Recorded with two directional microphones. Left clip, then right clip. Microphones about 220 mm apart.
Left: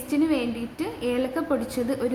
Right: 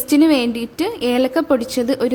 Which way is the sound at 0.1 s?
50° right (ahead or behind).